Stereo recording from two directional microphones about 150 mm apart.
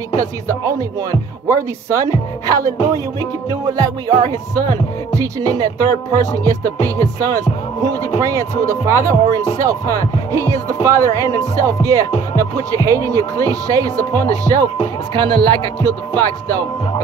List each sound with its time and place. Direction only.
0.2 s music: 20° right (ahead or behind)
7.0 s speech: 25° right (ahead or behind)
8.2 s music: 20° right (ahead or behind)